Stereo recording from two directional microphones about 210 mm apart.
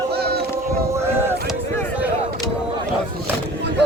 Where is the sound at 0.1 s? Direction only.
50° right (ahead or behind).